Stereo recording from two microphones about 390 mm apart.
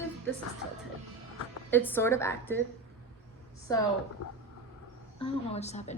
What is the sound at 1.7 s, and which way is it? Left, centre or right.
Speech, centre.